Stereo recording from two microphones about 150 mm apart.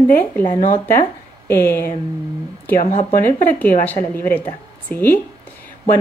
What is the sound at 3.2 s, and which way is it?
Speech, 10° left (ahead or behind).